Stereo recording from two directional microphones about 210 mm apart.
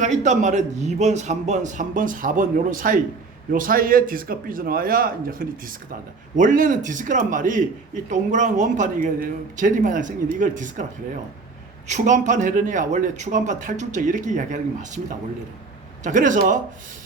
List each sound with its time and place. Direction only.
0.0 s a man's voice: 35° right (ahead or behind)
11.9 s a man's voice: 35° right (ahead or behind)
16.0 s a man's voice: 35° right (ahead or behind)